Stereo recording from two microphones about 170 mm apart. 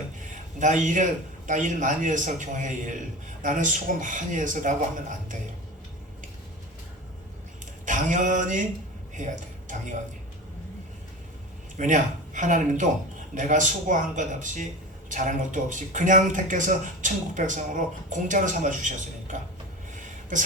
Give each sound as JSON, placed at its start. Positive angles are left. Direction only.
{"t": 0.6, "sound": "a man's voice", "side_deg": -50}
{"t": 7.9, "sound": "a man's voice", "side_deg": -50}
{"t": 11.8, "sound": "a man's voice", "side_deg": -50}